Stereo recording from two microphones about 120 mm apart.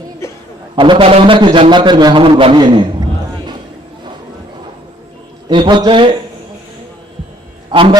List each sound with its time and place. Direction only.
0.8 s a man's voice: 45° right (ahead or behind)
2.4 s a sound: 45° right (ahead or behind)
5.5 s a man's voice: 40° right (ahead or behind)